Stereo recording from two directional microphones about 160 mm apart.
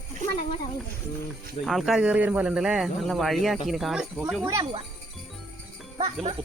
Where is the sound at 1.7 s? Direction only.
Centre (ahead or behind).